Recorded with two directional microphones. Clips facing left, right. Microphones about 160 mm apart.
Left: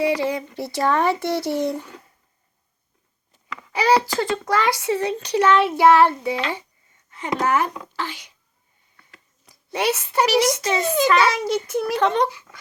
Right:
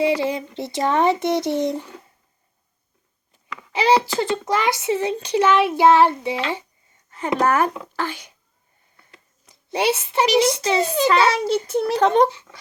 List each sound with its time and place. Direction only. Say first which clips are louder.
0.0 s a child's voice: right 1 dB; 25° right (ahead or behind)
3.7 s a child's voice: right 1 dB; 25° right (ahead or behind)
7.3 s speech: right 2 dB; 50° right (ahead or behind)
9.5 s a child's voice: right 2 dB; 25° right (ahead or behind)
11.9 s speech: right 4 dB; 45° right (ahead or behind)